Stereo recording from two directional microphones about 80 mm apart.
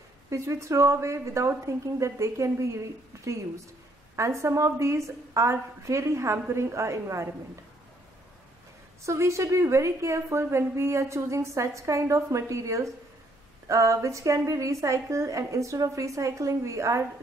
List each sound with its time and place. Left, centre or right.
0.3 s a woman's voice: right
4.2 s a woman's voice: right
9.0 s a woman's voice: right